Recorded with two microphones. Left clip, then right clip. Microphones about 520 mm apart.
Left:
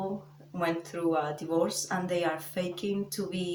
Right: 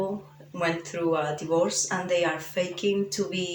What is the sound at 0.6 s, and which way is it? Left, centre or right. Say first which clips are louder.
Speech: right 3 dB; left.